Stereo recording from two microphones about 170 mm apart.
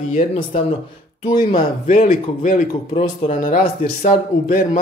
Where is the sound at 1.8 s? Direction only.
45° left (ahead or behind).